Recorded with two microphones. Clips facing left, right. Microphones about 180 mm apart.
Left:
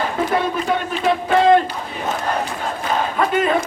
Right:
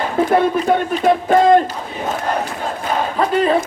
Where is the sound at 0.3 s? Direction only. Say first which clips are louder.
Right 5 dB; 50° right (ahead or behind).